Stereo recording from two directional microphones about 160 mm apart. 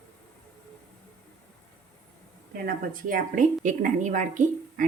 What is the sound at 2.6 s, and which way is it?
A woman's voice, 55° right (ahead or behind).